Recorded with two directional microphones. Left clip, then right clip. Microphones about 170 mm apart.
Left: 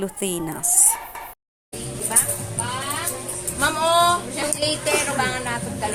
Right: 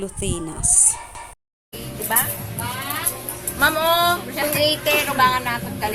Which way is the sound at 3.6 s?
10° right (ahead or behind).